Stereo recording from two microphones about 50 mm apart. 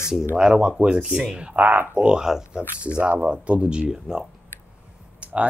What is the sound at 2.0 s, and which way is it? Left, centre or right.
Speech, centre.